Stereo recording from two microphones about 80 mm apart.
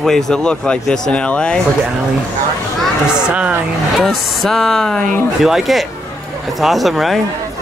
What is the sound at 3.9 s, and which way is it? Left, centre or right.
Speech, centre.